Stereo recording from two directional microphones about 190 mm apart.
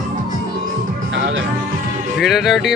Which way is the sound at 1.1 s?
75° right (ahead or behind).